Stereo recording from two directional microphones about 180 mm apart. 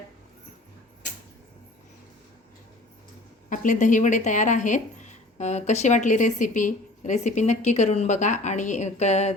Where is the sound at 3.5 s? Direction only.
45° left (ahead or behind).